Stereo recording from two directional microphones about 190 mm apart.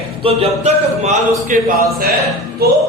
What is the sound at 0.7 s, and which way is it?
Speech, 35° right (ahead or behind).